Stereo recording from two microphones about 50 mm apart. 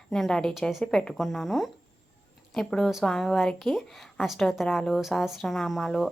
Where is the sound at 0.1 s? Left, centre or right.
Centre.